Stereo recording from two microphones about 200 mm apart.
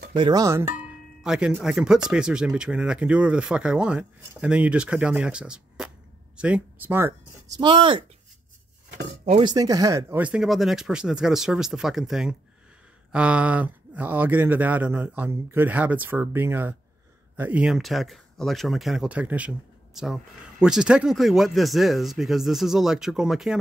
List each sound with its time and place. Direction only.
0.1 s speech: 20° right (ahead or behind)
1.2 s speech: 5° right (ahead or behind); by 8.0 s 25° right (ahead or behind)
9.4 s speech: 20° right (ahead or behind); by 23.6 s centre (ahead or behind)